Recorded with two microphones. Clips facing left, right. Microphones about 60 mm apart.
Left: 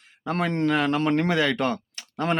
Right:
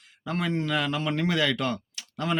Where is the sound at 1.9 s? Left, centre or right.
Left.